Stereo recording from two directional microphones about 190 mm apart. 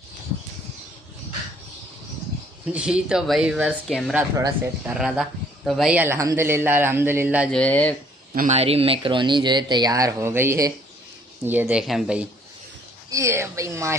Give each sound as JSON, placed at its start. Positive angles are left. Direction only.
{"t": 2.6, "sound": "speech", "side_deg": -5}
{"t": 4.2, "sound": "a man's voice", "side_deg": -15}
{"t": 4.9, "sound": "a man's voice", "side_deg": 0}
{"t": 7.4, "sound": "speech", "side_deg": 5}
{"t": 8.4, "sound": "speech", "side_deg": -35}
{"t": 13.1, "sound": "a man's voice", "side_deg": -15}